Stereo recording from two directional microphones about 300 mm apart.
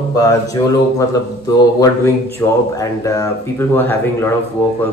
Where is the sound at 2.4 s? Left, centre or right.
Centre.